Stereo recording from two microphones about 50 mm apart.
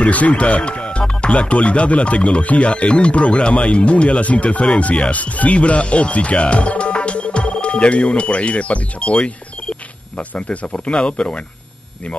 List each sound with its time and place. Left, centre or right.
0.0 s speech: left